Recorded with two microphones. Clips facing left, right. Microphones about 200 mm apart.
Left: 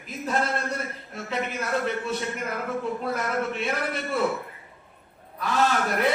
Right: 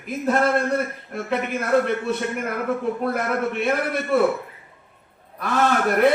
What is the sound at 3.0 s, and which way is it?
Speech, 55° right (ahead or behind).